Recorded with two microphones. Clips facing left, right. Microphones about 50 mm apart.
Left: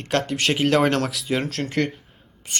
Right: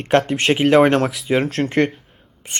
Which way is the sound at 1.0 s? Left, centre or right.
Centre.